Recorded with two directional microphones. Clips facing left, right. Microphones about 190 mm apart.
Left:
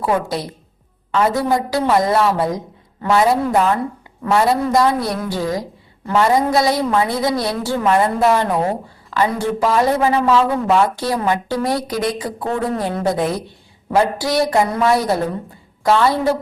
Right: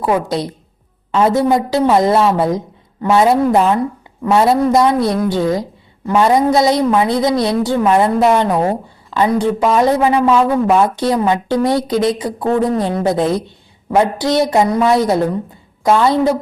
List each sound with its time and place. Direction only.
0.0 s a woman's voice: 20° right (ahead or behind)